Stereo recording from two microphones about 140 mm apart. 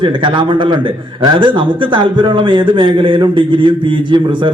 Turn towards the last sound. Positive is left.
turn(degrees=-35)  # may be behind; listen again after turning